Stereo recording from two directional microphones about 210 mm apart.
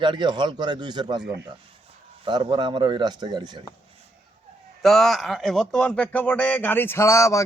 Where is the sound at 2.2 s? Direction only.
20° right (ahead or behind).